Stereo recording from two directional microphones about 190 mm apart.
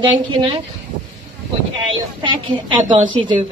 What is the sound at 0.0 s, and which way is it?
Speech, 25° right (ahead or behind).